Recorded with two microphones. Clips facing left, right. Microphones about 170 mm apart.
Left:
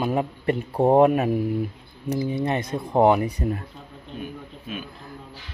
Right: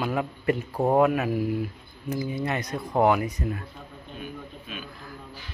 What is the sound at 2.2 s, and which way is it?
Speech, 25° left (ahead or behind).